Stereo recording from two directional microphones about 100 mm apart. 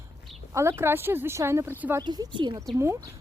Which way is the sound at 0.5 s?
25° right (ahead or behind).